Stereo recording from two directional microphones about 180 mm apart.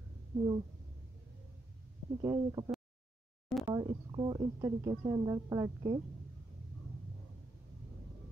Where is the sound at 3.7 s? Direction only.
25° right (ahead or behind).